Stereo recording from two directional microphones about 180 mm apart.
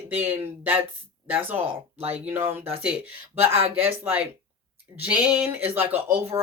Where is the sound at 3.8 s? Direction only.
10° right (ahead or behind).